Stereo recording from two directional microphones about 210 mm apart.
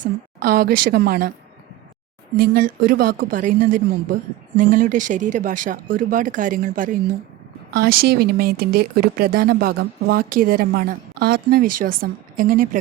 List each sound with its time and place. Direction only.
0.0 s speech: 45° right (ahead or behind)
2.4 s a woman's voice: 45° right (ahead or behind)